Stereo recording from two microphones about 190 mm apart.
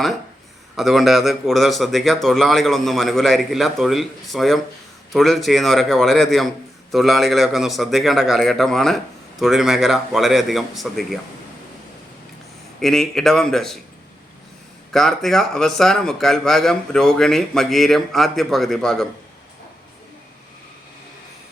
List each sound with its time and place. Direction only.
0.8 s speech: centre (ahead or behind)
12.8 s speech: centre (ahead or behind)
14.9 s speech: centre (ahead or behind)